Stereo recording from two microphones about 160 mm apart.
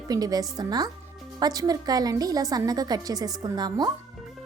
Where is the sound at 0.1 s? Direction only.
25° right (ahead or behind).